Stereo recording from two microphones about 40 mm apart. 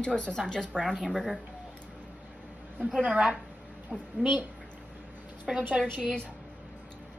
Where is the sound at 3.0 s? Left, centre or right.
Right.